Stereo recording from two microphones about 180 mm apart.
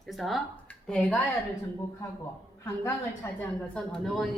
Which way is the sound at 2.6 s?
10° left (ahead or behind).